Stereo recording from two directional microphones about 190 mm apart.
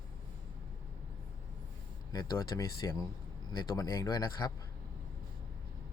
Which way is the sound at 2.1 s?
20° left (ahead or behind).